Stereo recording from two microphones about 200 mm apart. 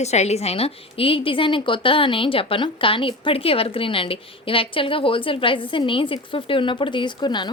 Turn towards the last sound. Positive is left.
turn(degrees=20)  # may be behind; listen again after turning